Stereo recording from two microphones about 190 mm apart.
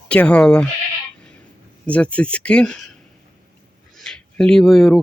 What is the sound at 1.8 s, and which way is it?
Speech, 5° left (ahead or behind).